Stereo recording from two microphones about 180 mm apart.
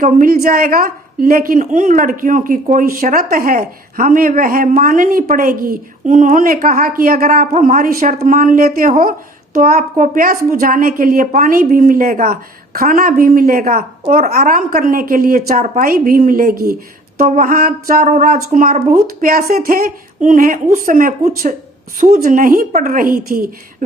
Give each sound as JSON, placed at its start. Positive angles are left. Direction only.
{"t": 0.0, "sound": "a woman's voice", "side_deg": -50}